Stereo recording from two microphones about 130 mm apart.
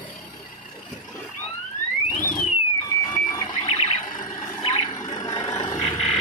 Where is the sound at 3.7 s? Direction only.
45° left (ahead or behind).